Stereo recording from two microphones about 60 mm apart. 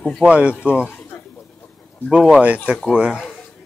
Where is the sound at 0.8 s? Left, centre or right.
Left.